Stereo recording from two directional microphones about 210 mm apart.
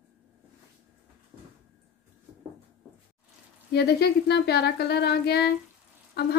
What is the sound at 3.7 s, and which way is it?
Speech, 50° left (ahead or behind).